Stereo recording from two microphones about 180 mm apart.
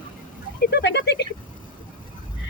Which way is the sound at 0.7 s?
70° left (ahead or behind).